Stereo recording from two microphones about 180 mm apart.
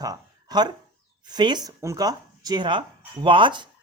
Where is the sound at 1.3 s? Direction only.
25° right (ahead or behind).